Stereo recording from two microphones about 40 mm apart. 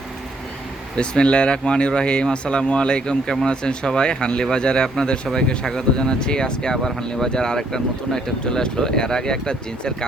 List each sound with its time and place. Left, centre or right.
0.9 s speech: left